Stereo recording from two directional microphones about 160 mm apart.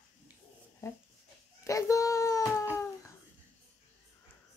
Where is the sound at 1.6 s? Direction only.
20° left (ahead or behind).